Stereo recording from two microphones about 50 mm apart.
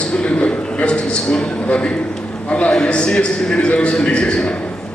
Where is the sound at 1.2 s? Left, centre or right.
Centre.